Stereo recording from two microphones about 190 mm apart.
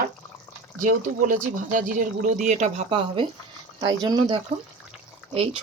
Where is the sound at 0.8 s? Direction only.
45° right (ahead or behind).